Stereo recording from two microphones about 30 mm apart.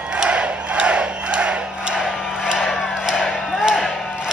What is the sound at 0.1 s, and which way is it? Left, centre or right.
Crowd, right.